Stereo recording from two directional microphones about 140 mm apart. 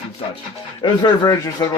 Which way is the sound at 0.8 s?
35° left (ahead or behind).